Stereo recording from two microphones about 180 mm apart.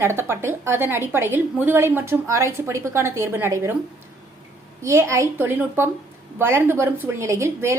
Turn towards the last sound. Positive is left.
turn(degrees=-15)  # may be behind; listen again after turning